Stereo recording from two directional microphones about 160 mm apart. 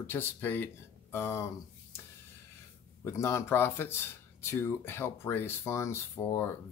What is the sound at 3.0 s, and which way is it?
Speech, 15° left (ahead or behind).